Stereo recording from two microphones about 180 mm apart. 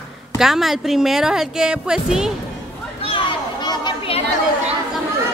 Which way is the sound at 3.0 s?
30° left (ahead or behind).